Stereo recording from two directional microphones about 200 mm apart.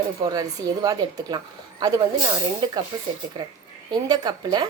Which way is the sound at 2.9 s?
20° right (ahead or behind).